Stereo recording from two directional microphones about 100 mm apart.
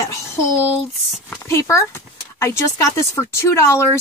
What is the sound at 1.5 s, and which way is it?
Speech, 30° left (ahead or behind).